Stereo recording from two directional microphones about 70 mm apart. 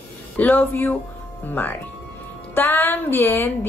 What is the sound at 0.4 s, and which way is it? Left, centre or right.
Speech, left.